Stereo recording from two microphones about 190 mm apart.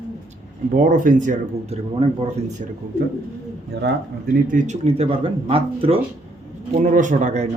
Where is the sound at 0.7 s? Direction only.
45° right (ahead or behind).